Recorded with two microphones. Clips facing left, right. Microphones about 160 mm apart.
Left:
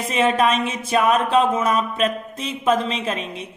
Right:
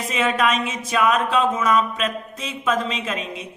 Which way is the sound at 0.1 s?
30° left (ahead or behind).